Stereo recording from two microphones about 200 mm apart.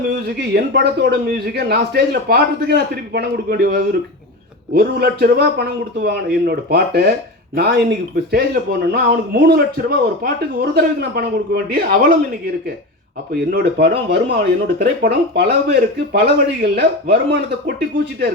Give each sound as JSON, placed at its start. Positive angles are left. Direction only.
{"t": 0.1, "sound": "speech", "side_deg": -55}
{"t": 13.3, "sound": "speech", "side_deg": -50}